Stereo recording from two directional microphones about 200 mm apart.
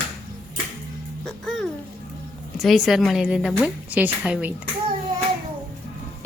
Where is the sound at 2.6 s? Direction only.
Centre (ahead or behind).